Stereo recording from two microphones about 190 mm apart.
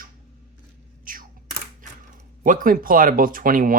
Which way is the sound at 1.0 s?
45° right (ahead or behind).